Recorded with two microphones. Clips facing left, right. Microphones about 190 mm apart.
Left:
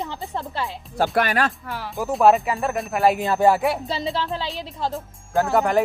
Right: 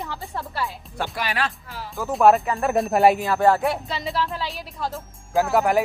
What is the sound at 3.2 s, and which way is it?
Speech, 20° left (ahead or behind).